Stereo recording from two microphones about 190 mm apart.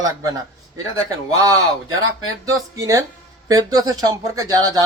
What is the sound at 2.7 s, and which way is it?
Speech, 15° right (ahead or behind).